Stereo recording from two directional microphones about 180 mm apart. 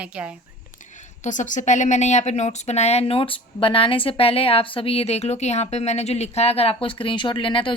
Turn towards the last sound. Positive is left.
turn(degrees=30)  # may be behind; listen again after turning